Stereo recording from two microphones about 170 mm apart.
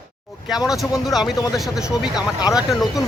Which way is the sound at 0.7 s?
Centre (ahead or behind).